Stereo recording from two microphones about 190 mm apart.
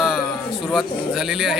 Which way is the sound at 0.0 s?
Centre (ahead or behind).